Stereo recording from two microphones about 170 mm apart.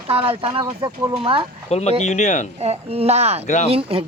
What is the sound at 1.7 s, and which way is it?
Speech, 40° left (ahead or behind).